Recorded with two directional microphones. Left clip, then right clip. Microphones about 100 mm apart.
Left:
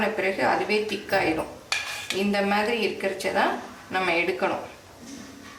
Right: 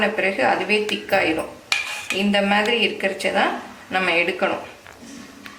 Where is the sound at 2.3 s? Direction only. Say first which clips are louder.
Right 6 dB; 20° right (ahead or behind).